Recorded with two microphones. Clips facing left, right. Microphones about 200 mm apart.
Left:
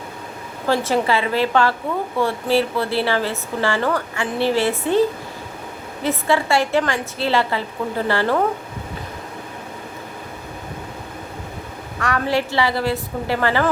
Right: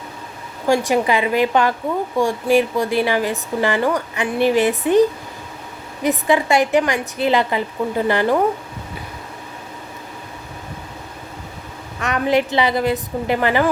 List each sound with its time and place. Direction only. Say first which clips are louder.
0.7 s a woman's voice: right 2 dB; 15° right (ahead or behind)
11.9 s a woman's voice: right 3 dB; 20° right (ahead or behind)